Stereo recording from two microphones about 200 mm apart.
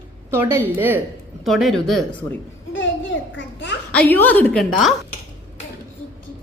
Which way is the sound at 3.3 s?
65° left (ahead or behind).